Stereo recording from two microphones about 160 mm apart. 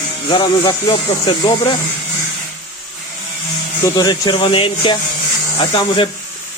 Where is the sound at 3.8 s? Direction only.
25° left (ahead or behind).